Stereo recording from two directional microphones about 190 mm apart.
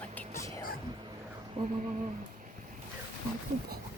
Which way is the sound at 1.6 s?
30° right (ahead or behind).